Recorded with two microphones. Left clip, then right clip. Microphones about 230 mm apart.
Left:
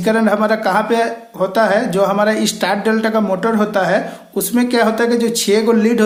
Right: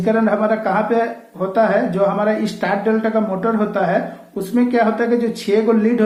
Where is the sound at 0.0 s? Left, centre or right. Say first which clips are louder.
Left 2 dB; left.